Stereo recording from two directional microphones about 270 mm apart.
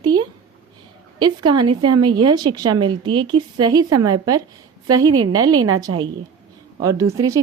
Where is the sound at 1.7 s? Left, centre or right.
Right.